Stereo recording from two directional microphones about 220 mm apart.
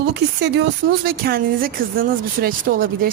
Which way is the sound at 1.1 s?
45° right (ahead or behind).